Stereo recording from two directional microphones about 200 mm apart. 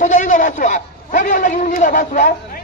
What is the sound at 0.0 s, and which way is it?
A man's voice, 40° left (ahead or behind).